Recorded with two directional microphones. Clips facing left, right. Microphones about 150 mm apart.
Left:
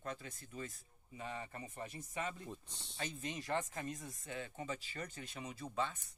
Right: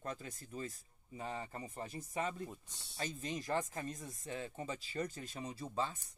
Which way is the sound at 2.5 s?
10° right (ahead or behind).